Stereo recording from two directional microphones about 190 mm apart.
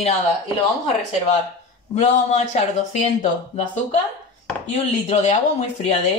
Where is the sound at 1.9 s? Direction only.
35° left (ahead or behind).